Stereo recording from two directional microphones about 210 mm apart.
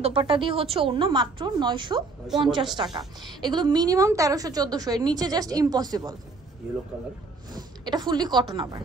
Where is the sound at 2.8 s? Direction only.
20° right (ahead or behind).